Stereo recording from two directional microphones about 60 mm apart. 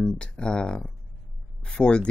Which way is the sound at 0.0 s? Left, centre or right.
Centre.